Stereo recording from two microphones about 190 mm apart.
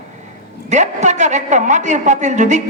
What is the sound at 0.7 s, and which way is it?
A woman's voice, 40° right (ahead or behind).